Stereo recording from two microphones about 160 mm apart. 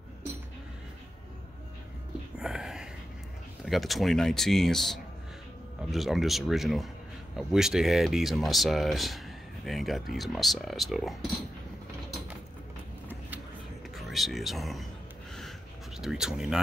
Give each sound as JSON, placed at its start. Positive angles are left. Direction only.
{"t": 2.3, "sound": "whispering", "side_deg": -5}
{"t": 3.6, "sound": "speech", "side_deg": 0}
{"t": 13.9, "sound": "speech", "side_deg": 0}
{"t": 16.0, "sound": "speech", "side_deg": -5}